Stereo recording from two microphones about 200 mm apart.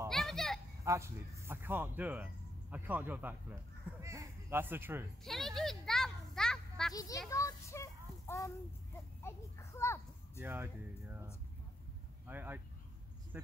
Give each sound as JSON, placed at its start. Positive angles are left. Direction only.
{"t": 0.1, "sound": "children playing", "side_deg": 0}
{"t": 0.8, "sound": "speech", "side_deg": -15}
{"t": 4.0, "sound": "a sound", "side_deg": -15}
{"t": 5.2, "sound": "a sound", "side_deg": 0}
{"t": 6.9, "sound": "a child's voice", "side_deg": 15}
{"t": 7.2, "sound": "a sound", "side_deg": 15}
{"t": 9.2, "sound": "a child's voice", "side_deg": 15}
{"t": 10.4, "sound": "speech", "side_deg": -10}
{"t": 12.3, "sound": "speech", "side_deg": -10}